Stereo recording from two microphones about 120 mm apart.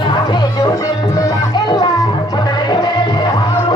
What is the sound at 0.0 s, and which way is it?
Music, 35° left (ahead or behind).